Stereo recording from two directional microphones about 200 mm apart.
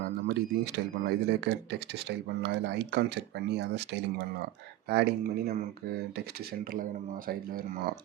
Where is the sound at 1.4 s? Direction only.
60° right (ahead or behind).